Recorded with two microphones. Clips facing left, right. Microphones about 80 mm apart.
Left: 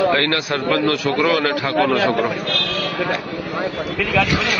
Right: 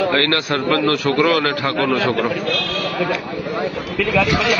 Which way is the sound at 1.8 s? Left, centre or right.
Left.